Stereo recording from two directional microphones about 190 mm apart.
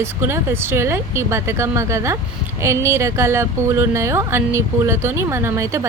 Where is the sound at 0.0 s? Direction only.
15° right (ahead or behind).